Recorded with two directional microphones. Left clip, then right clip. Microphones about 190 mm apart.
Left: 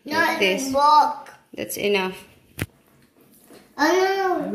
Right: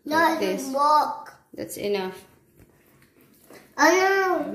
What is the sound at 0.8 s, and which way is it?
Speech, 65° right (ahead or behind).